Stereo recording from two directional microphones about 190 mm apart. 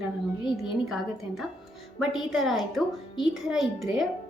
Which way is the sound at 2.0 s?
Centre (ahead or behind).